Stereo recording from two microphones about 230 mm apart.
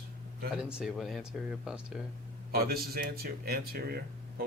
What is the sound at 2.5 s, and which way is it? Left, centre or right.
Speech, right.